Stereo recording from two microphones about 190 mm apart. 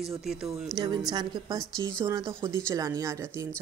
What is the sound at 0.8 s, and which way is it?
A woman's voice, 20° right (ahead or behind).